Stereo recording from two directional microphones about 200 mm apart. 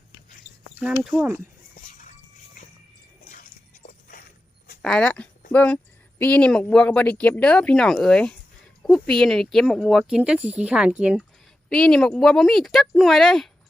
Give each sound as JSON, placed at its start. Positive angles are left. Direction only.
{"t": 0.8, "sound": "speech", "side_deg": 0}
{"t": 3.3, "sound": "a sound", "side_deg": 45}
{"t": 4.8, "sound": "speech", "side_deg": 5}
{"t": 11.7, "sound": "speech", "side_deg": 5}